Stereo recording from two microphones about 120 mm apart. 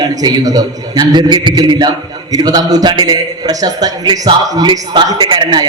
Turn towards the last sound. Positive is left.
turn(degrees=-40)  # may be behind; listen again after turning